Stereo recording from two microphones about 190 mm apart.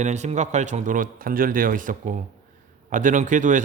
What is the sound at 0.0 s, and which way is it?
A man's voice, 35° right (ahead or behind).